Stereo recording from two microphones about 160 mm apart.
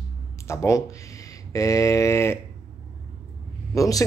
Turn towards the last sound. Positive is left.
turn(degrees=20)  # may be behind; listen again after turning